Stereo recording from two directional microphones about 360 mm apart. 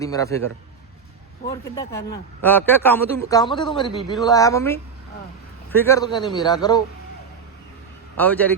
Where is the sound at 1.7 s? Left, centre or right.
Centre.